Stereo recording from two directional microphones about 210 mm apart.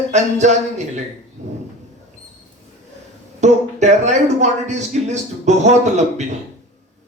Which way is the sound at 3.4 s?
35° right (ahead or behind).